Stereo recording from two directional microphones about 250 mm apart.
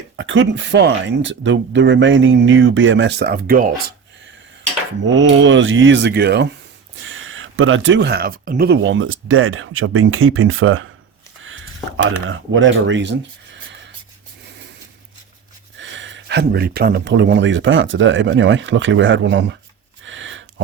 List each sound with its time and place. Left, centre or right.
0.2 s speech: right
5.1 s speech: right
7.0 s speech: right
12.2 s speech: right
15.8 s speech: right
20.1 s a sound: right